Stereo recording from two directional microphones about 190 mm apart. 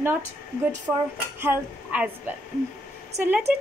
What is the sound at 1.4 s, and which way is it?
A woman's voice, 10° right (ahead or behind).